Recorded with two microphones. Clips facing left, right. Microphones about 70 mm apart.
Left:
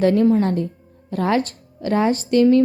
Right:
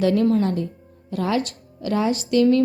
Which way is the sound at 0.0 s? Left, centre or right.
Left.